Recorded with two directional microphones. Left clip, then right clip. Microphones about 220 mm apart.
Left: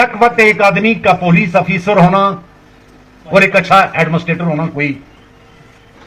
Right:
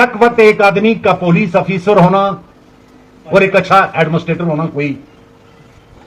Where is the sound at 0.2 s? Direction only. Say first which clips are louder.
Right 1 dB; 55° right (ahead or behind).